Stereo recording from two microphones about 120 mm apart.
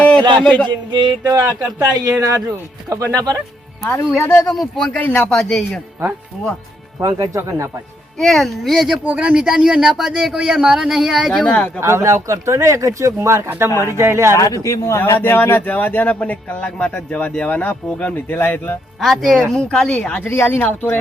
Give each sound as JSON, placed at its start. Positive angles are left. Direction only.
{"t": 0.2, "sound": "a man's voice", "side_deg": -40}
{"t": 0.4, "sound": "a man's voice", "side_deg": 10}
{"t": 1.2, "sound": "speech", "side_deg": -30}
{"t": 4.2, "sound": "a man's voice", "side_deg": 10}
{"t": 7.0, "sound": "speech", "side_deg": -30}
{"t": 8.2, "sound": "speech", "side_deg": 0}
{"t": 11.4, "sound": "a man's voice", "side_deg": 10}
{"t": 11.8, "sound": "speech", "side_deg": -20}
{"t": 14.3, "sound": "a man's voice", "side_deg": 30}
{"t": 18.9, "sound": "a man's voice", "side_deg": 0}